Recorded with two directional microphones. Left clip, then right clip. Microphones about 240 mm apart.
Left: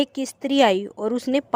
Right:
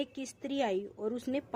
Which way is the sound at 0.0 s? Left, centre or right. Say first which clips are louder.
Left 13 dB; left.